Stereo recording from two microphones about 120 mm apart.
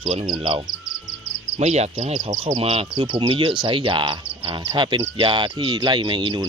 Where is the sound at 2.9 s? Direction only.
40° right (ahead or behind).